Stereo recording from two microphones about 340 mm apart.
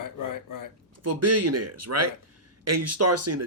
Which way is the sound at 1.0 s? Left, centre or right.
Right.